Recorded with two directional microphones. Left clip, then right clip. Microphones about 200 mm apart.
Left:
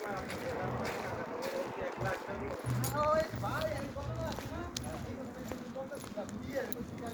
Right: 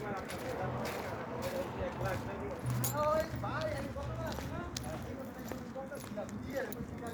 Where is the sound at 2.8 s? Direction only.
30° right (ahead or behind).